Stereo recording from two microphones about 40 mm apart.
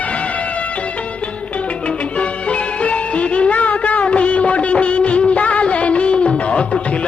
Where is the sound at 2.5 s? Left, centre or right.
Left.